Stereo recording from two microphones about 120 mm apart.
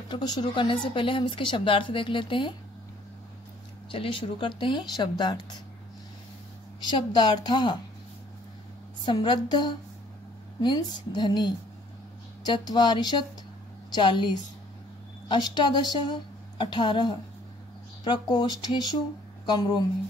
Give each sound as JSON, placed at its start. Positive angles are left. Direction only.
{"t": 0.1, "sound": "speech", "side_deg": 35}
{"t": 3.9, "sound": "a woman's voice", "side_deg": 45}
{"t": 6.8, "sound": "a woman's voice", "side_deg": 35}
{"t": 9.0, "sound": "a woman's voice", "side_deg": 40}